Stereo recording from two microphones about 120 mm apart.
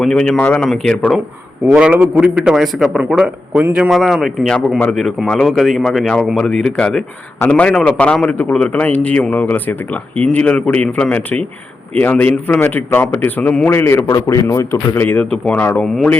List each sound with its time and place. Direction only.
0.0 s a man's voice: 5° left (ahead or behind)
1.6 s a man's voice: 10° right (ahead or behind); by 16.1 s 10° left (ahead or behind)